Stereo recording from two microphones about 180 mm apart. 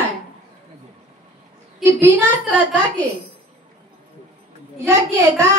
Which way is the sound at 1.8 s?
10° right (ahead or behind).